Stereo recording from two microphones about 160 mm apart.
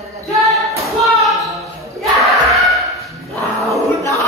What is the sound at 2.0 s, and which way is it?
Battle cry, centre (ahead or behind).